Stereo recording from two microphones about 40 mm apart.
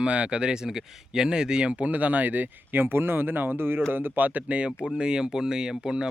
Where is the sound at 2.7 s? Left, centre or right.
Right.